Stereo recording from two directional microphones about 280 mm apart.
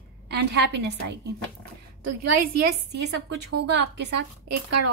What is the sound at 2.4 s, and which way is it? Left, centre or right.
Speech, right.